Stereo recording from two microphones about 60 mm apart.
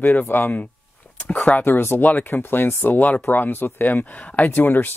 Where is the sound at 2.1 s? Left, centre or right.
Left.